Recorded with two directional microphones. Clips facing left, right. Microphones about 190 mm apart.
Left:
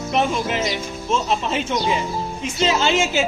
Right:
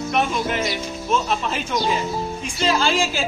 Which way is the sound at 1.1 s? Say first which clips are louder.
Left 1 dB; 25° left (ahead or behind).